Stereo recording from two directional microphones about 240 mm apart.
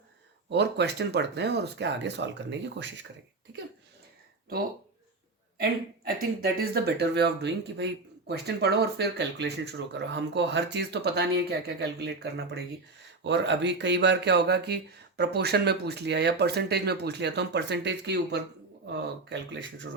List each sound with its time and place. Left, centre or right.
0.5 s speech: right
6.1 s speech: right